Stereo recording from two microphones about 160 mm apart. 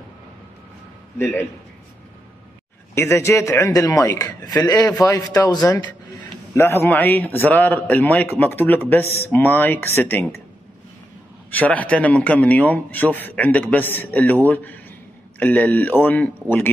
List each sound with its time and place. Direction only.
1.1 s a man's voice: 15° left (ahead or behind)
2.9 s a man's voice: 15° left (ahead or behind)
11.5 s a man's voice: 10° left (ahead or behind)